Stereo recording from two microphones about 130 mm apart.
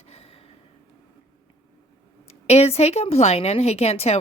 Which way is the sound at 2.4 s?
55° left (ahead or behind).